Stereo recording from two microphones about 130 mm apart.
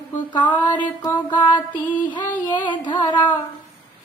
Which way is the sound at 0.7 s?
35° left (ahead or behind).